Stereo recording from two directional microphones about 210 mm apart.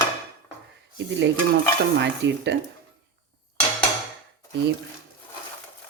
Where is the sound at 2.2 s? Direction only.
55° right (ahead or behind).